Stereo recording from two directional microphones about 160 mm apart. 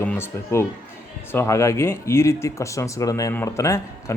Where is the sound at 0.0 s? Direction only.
10° left (ahead or behind).